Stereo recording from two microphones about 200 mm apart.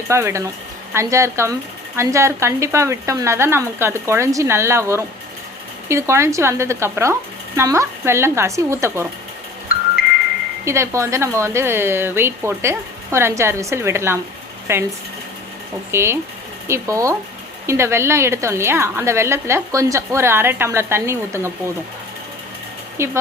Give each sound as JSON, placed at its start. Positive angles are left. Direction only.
{"t": 0.1, "sound": "a woman's voice", "side_deg": -15}
{"t": 9.7, "sound": "music", "side_deg": 45}
{"t": 10.7, "sound": "a woman's voice", "side_deg": -15}
{"t": 15.9, "sound": "a woman's voice", "side_deg": -10}
{"t": 23.0, "sound": "a woman's voice", "side_deg": -15}